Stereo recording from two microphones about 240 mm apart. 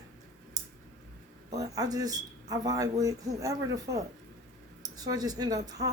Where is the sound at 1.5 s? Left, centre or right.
Centre.